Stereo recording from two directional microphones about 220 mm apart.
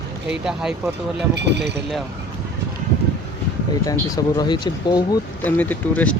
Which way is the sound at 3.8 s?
15° left (ahead or behind).